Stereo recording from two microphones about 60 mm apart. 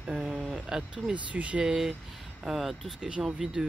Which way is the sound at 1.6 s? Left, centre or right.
Centre.